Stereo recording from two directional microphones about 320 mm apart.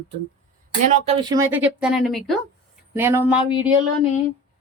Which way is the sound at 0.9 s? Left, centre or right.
Centre.